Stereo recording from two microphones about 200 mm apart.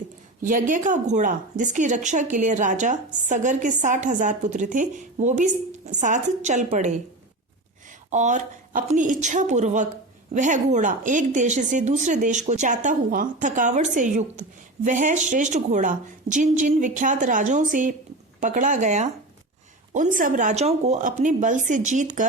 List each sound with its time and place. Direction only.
0.4 s a woman's voice: 40° right (ahead or behind)
8.1 s a woman's voice: 35° right (ahead or behind)